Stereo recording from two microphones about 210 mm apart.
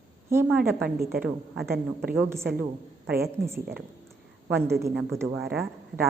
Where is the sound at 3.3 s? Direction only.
10° right (ahead or behind).